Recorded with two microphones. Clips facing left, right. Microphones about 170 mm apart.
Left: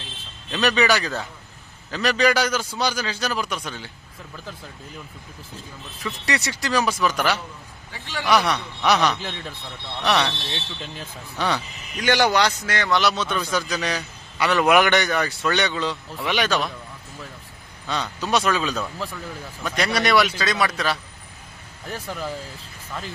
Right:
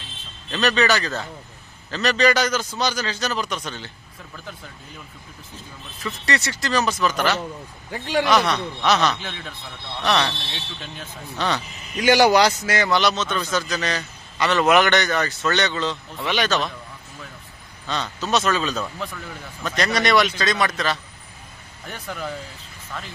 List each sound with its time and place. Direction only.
0.5 s a man's voice: 10° left (ahead or behind)
6.2 s a man's voice: 15° left (ahead or behind)
7.9 s a man's voice: 45° right (ahead or behind)
8.3 s a man's voice: 10° left (ahead or behind)
11.3 s a man's voice: 10° left (ahead or behind)
12.0 s a man's voice: 10° right (ahead or behind); by 16.7 s 10° left (ahead or behind)
17.8 s a man's voice: 10° left (ahead or behind)
22.0 s speech: 5° left (ahead or behind)